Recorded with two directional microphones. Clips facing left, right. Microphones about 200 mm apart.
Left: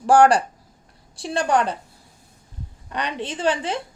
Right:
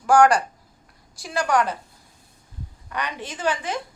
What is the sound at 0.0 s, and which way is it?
A woman's voice, 35° left (ahead or behind).